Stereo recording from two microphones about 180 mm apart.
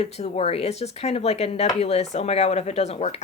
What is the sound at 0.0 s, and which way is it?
Speech, 35° left (ahead or behind).